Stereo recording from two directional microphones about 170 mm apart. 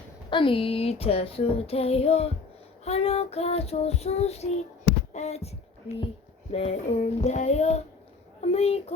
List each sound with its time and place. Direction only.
0.3 s child singing: 30° left (ahead or behind)
8.4 s speech: 40° left (ahead or behind)